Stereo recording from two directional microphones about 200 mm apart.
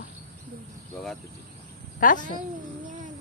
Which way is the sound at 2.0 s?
40° left (ahead or behind).